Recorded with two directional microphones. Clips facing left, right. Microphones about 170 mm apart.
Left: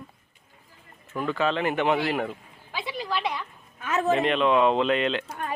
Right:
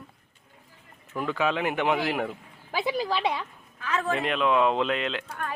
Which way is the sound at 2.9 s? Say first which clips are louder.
Right 1 dB; 30° right (ahead or behind).